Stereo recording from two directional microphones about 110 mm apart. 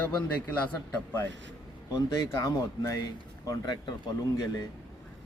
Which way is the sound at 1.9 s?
30° left (ahead or behind).